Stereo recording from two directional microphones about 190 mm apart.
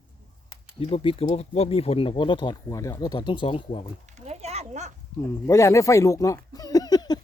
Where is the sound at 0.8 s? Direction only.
30° left (ahead or behind).